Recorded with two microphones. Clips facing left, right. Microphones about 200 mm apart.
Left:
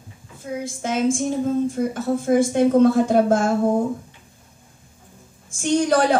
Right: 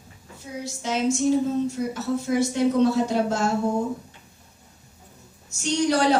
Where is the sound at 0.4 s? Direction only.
50° left (ahead or behind).